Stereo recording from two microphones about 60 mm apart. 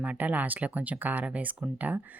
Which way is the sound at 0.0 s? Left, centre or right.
Right.